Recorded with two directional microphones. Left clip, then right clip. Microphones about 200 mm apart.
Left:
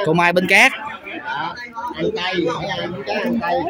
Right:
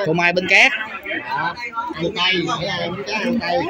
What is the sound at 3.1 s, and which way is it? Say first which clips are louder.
Speech: even; 45° right (ahead or behind).